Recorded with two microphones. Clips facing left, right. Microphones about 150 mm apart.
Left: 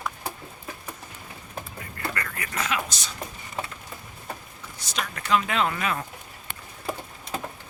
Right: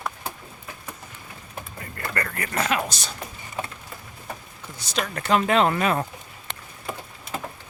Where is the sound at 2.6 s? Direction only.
35° right (ahead or behind).